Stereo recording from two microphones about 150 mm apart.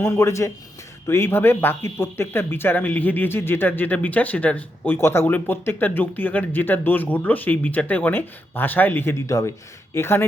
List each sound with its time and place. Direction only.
0.0 s speech: 15° left (ahead or behind)